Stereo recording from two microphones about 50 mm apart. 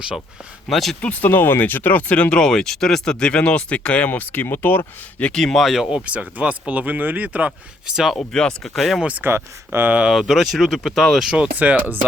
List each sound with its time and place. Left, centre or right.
0.7 s speech: centre
1.2 s speech: left
2.3 s speech: centre
4.1 s speech: left
5.3 s speech: centre
5.9 s speech: right
7.9 s speech: centre
8.2 s speech: centre
8.7 s speech: centre
9.2 s speech: right
10.1 s speech: centre
11.5 s speech: right